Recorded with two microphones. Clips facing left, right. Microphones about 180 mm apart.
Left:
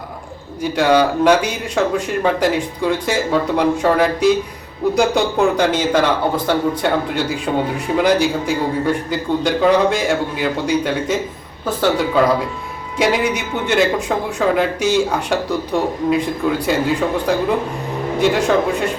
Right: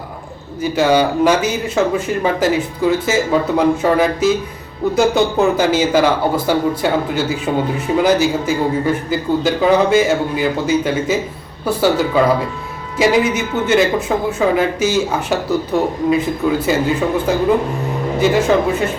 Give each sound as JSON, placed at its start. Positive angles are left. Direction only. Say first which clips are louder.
{"t": 0.6, "sound": "a man's voice", "louder": "right 1 dB", "side_deg": 0}